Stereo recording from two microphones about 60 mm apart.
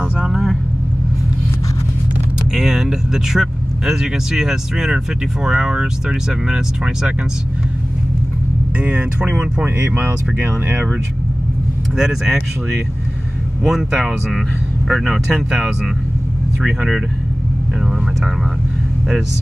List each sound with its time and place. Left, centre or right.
0.0 s vehicle: centre
2.5 s speech: centre
8.7 s speech: right
12.0 s speech: centre